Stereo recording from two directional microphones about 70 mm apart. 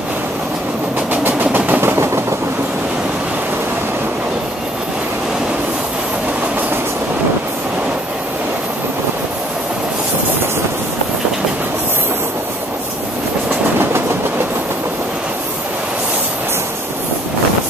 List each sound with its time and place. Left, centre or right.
1.2 s vehicle: right